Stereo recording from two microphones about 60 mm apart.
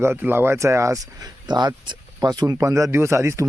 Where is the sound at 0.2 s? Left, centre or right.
Right.